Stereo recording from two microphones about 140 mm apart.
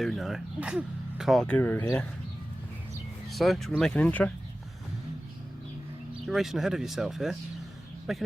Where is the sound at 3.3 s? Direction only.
Centre (ahead or behind).